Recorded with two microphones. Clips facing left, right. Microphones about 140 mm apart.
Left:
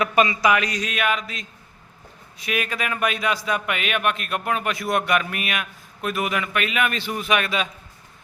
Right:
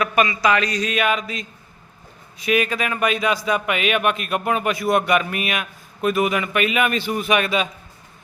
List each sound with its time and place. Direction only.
0.0 s speech: 20° left (ahead or behind)
0.5 s a man's voice: 10° left (ahead or behind)